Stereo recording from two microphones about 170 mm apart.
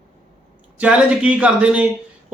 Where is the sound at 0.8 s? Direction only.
5° right (ahead or behind).